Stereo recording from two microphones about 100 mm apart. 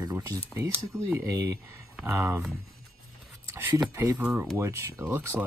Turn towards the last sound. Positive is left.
turn(degrees=-25)  # may be behind; listen again after turning